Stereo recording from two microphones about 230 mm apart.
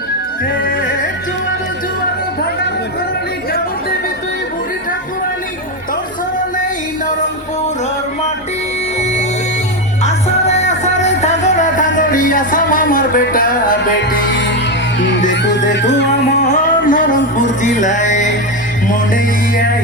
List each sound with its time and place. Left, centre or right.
0.6 s music: left
10.0 s music: left
15.7 s music: left
16.4 s music: left